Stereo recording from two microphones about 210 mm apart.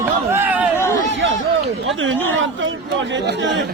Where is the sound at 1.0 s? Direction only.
60° right (ahead or behind).